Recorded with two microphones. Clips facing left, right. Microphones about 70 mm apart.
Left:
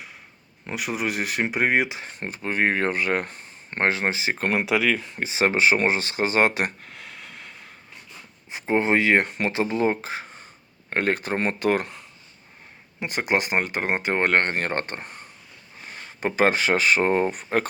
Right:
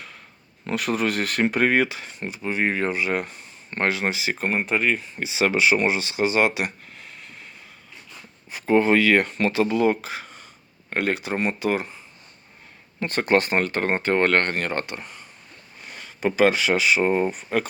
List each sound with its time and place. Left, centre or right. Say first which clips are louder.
0.7 s speech: right 4 dB; centre
2.0 s speech: right 1 dB; left
4.4 s speech: left 2 dB; left
5.2 s speech: even; left
6.8 s a sound: left 2 dB; left
8.4 s speech: right 3 dB; left
10.8 s speech: left 1 dB; left
13.0 s speech: right 4 dB; centre
14.6 s speech: even; left